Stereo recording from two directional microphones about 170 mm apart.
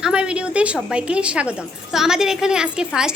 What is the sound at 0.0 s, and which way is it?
A woman's voice, 5° right (ahead or behind).